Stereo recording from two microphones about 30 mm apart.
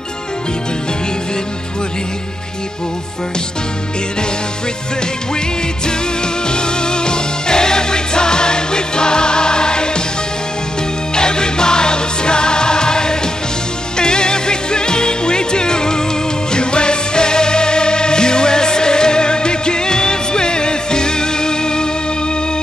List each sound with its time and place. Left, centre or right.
5.9 s music: left
11.1 s music: left